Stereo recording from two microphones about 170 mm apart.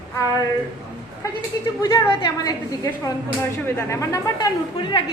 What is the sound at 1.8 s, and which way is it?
A woman's voice, 25° left (ahead or behind).